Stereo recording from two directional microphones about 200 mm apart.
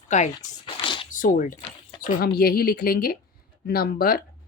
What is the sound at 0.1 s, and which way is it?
Speech, 40° left (ahead or behind).